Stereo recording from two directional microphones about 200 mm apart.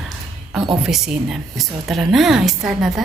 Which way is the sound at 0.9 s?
Centre (ahead or behind).